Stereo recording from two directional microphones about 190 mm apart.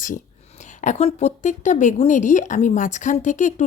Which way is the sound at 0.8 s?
35° left (ahead or behind).